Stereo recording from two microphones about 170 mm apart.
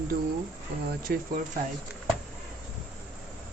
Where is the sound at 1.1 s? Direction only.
60° right (ahead or behind).